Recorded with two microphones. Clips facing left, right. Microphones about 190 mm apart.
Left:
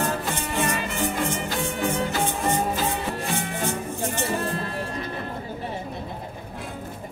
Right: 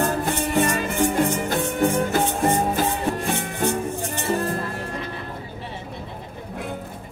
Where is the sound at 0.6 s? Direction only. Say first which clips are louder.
Right 5 dB; 45° right (ahead or behind).